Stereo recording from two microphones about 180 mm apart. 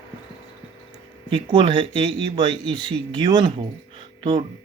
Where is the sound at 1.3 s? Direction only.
30° right (ahead or behind).